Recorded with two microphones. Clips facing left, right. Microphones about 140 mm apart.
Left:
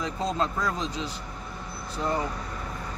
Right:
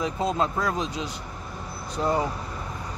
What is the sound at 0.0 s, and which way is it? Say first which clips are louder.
Speech: right 3 dB; 10° right (ahead or behind).